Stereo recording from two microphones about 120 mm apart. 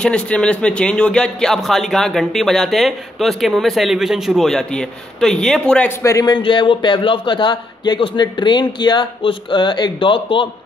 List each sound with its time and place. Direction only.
0.0 s speech: 10° left (ahead or behind)
5.9 s speech: 25° left (ahead or behind)
6.3 s a man's voice: 40° left (ahead or behind)